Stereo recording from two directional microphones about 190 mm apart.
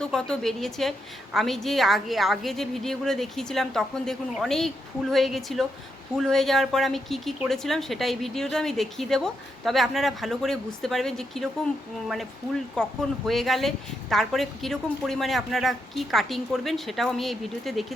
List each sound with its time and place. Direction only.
0.0 s a woman's voice: 5° left (ahead or behind)